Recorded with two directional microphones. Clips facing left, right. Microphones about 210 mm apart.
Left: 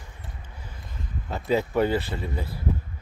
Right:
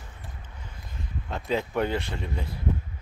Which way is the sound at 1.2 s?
5° left (ahead or behind).